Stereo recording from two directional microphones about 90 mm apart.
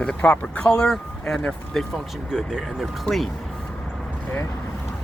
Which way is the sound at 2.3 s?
5° right (ahead or behind).